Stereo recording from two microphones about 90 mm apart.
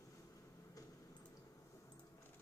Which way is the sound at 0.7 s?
40° left (ahead or behind).